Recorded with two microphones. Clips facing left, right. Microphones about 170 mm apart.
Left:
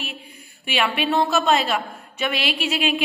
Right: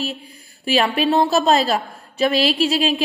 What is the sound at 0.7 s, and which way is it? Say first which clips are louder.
A woman's voice: right 5 dB; 35° right (ahead or behind).